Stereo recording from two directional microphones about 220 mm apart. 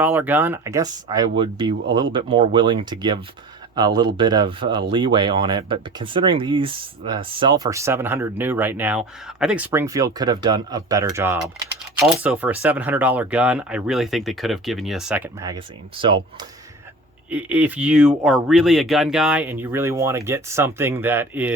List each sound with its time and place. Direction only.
0.0 s speech: 10° right (ahead or behind)
17.3 s speech: 5° right (ahead or behind)